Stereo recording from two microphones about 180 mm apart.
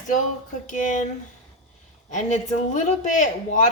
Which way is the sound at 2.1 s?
45° left (ahead or behind).